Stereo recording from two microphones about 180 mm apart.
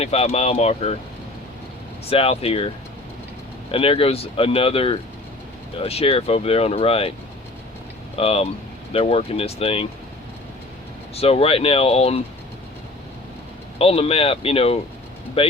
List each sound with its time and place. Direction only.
0.0 s speech: 35° left (ahead or behind)
2.0 s speech: 30° left (ahead or behind)
3.7 s speech: 30° left (ahead or behind)
8.2 s speech: 35° left (ahead or behind)
11.1 s speech: 35° left (ahead or behind)
13.7 s speech: 35° left (ahead or behind)